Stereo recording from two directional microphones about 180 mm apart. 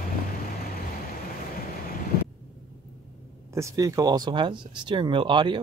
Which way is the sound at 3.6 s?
20° right (ahead or behind).